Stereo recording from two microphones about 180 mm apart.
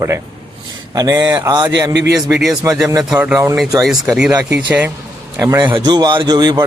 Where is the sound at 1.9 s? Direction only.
75° right (ahead or behind).